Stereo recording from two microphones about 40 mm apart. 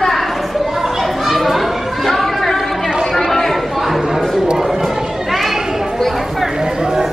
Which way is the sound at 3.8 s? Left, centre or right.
Centre.